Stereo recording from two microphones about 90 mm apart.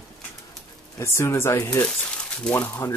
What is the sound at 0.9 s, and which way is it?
Speech, 30° left (ahead or behind).